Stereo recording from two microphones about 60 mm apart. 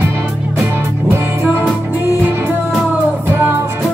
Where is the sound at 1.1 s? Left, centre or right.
Right.